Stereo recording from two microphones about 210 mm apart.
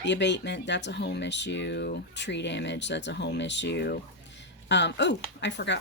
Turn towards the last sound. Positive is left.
turn(degrees=55)  # may be behind; listen again after turning